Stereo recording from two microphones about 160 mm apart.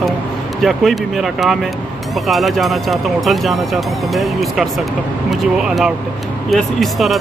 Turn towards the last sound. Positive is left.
turn(degrees=0)  # may be behind; listen again after turning